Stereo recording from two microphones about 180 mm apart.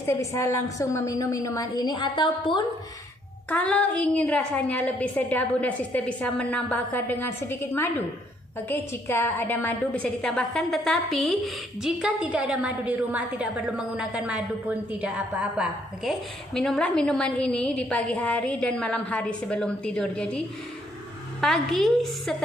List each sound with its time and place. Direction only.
0.0 s a woman's voice: 15° left (ahead or behind)
3.4 s a woman's voice: 10° left (ahead or behind)
9.0 s a woman's voice: 15° left (ahead or behind)